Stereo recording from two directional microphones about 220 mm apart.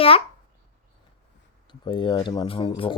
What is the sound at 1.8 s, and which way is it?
Speech, 20° left (ahead or behind).